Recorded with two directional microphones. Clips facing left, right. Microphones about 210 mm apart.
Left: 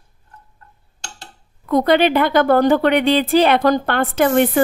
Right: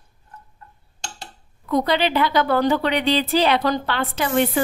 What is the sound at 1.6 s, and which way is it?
A woman's voice, 55° left (ahead or behind).